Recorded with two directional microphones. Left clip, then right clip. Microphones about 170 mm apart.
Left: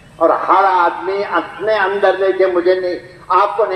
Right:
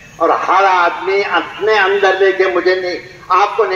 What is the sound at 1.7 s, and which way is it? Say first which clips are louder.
A man's voice: right 2 dB; 30° right (ahead or behind).